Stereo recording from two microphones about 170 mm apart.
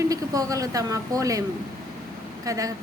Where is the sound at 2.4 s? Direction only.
20° right (ahead or behind).